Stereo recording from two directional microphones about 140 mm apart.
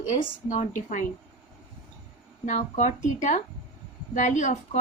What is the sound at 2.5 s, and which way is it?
A woman's voice, 55° left (ahead or behind).